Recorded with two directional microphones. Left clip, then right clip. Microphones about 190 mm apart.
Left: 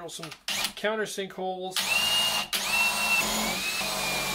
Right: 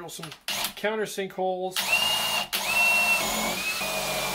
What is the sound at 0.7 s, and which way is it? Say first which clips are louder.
Speech: right 1 dB; 15° right (ahead or behind).